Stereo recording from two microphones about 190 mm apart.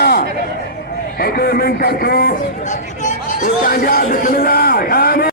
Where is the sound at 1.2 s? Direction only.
55° left (ahead or behind).